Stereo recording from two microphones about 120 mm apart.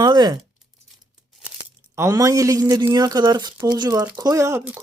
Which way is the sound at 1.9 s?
25° right (ahead or behind).